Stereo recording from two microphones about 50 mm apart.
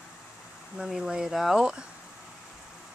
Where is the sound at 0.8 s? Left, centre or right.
Centre.